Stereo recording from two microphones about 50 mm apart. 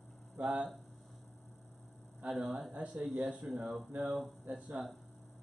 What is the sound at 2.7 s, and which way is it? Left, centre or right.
Speech, right.